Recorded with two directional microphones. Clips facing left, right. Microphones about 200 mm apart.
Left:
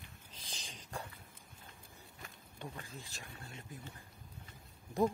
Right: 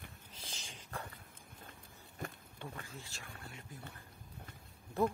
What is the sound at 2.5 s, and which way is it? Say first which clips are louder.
Speech: even; 15° left (ahead or behind).